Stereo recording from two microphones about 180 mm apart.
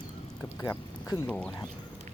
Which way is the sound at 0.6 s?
20° left (ahead or behind).